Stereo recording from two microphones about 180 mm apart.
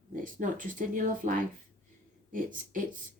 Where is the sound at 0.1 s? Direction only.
50° right (ahead or behind).